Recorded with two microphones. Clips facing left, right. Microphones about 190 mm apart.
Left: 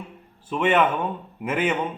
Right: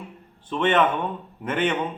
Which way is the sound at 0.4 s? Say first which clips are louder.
Even; 10° left (ahead or behind).